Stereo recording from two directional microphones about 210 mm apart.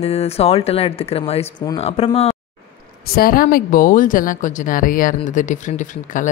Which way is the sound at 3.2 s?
45° left (ahead or behind).